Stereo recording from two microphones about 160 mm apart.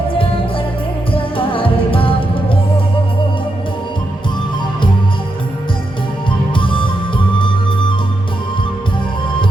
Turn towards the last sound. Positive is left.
turn(degrees=30)  # may be behind; listen again after turning